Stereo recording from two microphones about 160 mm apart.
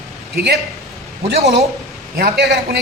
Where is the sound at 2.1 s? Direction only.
75° right (ahead or behind).